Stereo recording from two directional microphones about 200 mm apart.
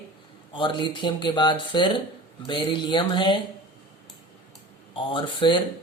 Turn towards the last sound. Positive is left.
turn(degrees=25)  # may be behind; listen again after turning